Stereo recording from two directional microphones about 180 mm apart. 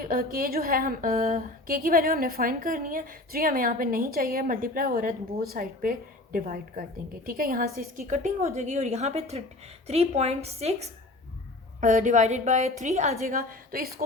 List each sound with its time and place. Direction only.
0.0 s a woman's voice: 55° right (ahead or behind)